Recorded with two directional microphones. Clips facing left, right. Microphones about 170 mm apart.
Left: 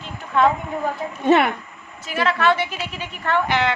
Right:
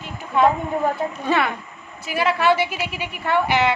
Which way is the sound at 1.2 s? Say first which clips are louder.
Left 6 dB; 25° left (ahead or behind).